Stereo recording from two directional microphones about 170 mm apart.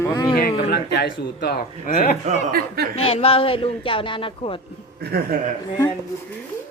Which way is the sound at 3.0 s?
35° left (ahead or behind).